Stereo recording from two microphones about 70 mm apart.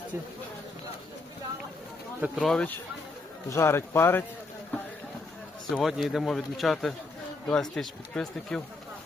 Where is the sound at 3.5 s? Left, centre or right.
Left.